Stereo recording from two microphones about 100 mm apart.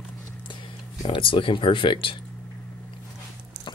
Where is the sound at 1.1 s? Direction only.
55° left (ahead or behind).